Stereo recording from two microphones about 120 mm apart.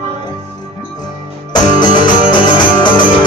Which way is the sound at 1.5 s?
40° left (ahead or behind).